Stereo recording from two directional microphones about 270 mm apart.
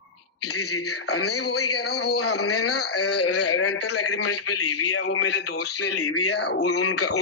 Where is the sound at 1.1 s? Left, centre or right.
Left.